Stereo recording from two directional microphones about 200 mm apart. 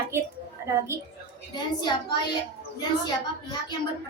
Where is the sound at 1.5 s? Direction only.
20° left (ahead or behind).